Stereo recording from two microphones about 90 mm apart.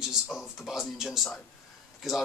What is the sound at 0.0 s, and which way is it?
A man's voice, 5° right (ahead or behind).